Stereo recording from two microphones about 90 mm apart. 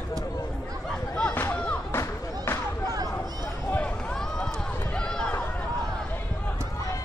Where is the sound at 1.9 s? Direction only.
30° left (ahead or behind).